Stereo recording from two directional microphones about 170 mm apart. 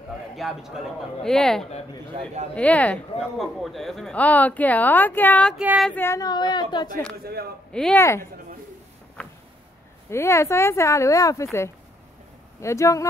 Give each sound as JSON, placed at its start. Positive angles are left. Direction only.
{"t": 0.4, "sound": "speech", "side_deg": 0}
{"t": 5.6, "sound": "female singing", "side_deg": -5}
{"t": 5.9, "sound": "a woman's voice", "side_deg": 15}
{"t": 7.7, "sound": "speech", "side_deg": 5}
{"t": 8.0, "sound": "speech", "side_deg": 15}
{"t": 10.0, "sound": "speech", "side_deg": 15}
{"t": 12.6, "sound": "speech", "side_deg": 20}